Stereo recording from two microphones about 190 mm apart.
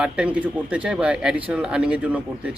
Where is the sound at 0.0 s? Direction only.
5° right (ahead or behind).